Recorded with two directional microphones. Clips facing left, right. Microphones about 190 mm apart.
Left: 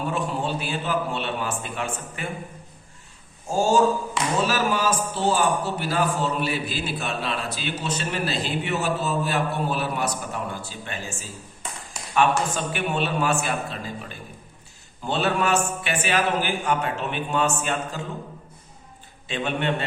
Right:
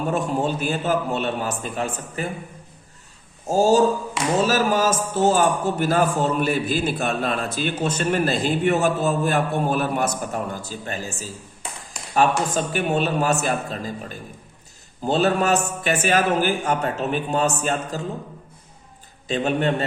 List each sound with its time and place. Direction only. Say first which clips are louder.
0.1 s a man's voice: right 4 dB; 45° right (ahead or behind)
3.4 s a sound: right 3 dB; 40° right (ahead or behind)
4.4 s a man's voice: right 4 dB; 40° right (ahead or behind)
19.3 s a man's voice: right 4 dB; 40° right (ahead or behind)